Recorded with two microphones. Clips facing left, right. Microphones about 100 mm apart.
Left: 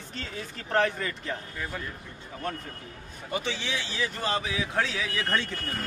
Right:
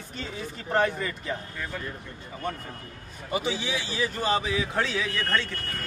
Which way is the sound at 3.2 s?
10° right (ahead or behind).